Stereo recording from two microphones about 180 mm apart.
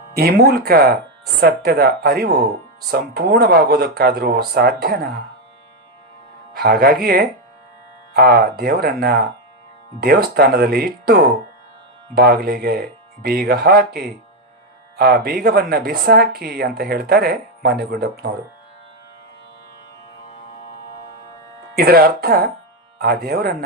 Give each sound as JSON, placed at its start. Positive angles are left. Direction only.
{"t": 0.2, "sound": "speech", "side_deg": -60}
{"t": 6.5, "sound": "speech", "side_deg": -55}
{"t": 21.8, "sound": "speech", "side_deg": -60}